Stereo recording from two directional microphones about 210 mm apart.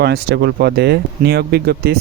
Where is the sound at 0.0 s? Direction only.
50° right (ahead or behind).